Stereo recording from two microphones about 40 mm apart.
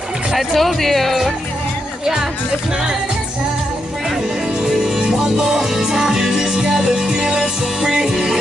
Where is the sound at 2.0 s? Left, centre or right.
Centre.